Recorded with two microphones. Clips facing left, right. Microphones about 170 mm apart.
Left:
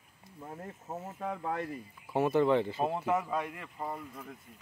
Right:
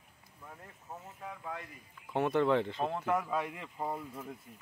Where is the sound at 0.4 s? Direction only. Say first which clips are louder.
Left 8 dB; 40° left (ahead or behind).